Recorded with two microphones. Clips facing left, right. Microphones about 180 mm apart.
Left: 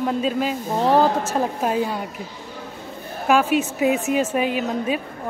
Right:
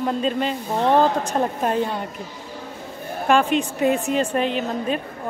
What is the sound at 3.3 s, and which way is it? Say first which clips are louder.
Speech: even; 5° left (ahead or behind).